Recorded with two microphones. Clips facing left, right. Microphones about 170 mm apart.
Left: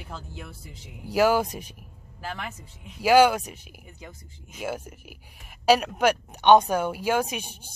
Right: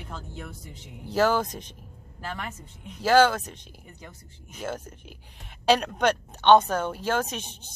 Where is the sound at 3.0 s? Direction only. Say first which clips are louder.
Left 2 dB; 10° left (ahead or behind).